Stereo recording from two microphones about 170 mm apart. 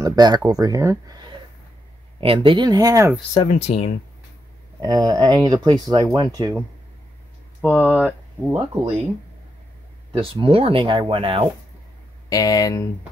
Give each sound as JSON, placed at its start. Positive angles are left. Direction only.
{"t": 0.0, "sound": "speech", "side_deg": -25}
{"t": 2.1, "sound": "speech", "side_deg": -30}
{"t": 3.4, "sound": "speech", "side_deg": 40}
{"t": 4.7, "sound": "speech", "side_deg": -20}
{"t": 7.6, "sound": "speech", "side_deg": -10}
{"t": 10.1, "sound": "speech", "side_deg": -30}
{"t": 12.3, "sound": "speech", "side_deg": 20}